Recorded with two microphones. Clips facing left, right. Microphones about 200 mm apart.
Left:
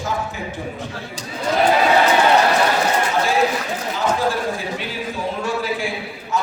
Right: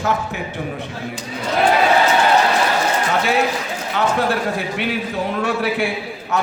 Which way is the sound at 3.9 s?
65° right (ahead or behind).